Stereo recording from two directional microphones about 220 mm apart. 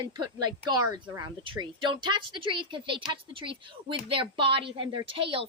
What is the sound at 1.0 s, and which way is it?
A woman's voice, 20° right (ahead or behind).